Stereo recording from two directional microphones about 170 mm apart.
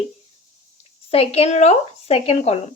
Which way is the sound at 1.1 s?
35° left (ahead or behind).